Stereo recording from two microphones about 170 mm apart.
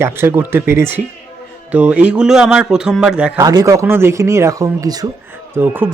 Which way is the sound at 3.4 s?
20° right (ahead or behind).